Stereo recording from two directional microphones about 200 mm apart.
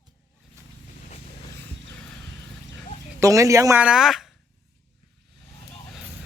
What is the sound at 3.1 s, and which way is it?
Speech, 15° right (ahead or behind).